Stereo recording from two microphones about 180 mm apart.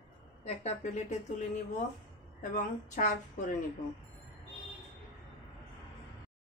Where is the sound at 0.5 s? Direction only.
35° left (ahead or behind).